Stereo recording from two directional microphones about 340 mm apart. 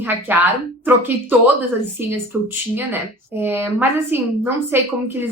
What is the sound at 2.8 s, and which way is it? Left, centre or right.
A woman's voice, centre.